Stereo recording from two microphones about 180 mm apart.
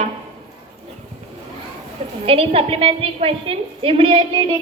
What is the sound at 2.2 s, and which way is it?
A woman's voice, 30° right (ahead or behind).